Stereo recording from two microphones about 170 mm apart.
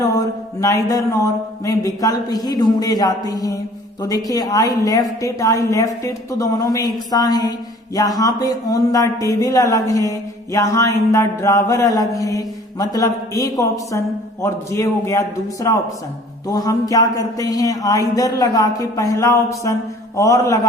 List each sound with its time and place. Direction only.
0.0 s a man's voice: 20° left (ahead or behind)
16.5 s a man's voice: 20° left (ahead or behind)